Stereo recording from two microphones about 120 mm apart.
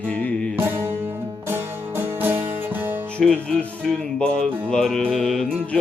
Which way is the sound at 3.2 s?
10° left (ahead or behind).